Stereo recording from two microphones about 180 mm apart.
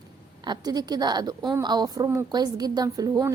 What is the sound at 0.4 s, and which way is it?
A woman's voice, 25° right (ahead or behind).